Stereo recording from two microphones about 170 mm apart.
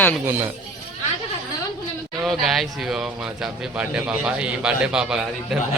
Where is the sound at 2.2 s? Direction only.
Centre (ahead or behind).